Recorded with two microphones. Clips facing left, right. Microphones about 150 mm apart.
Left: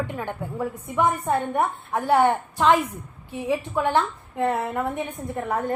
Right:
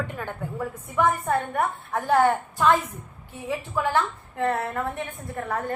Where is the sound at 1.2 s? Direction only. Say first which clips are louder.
Left 2 dB; 25° left (ahead or behind).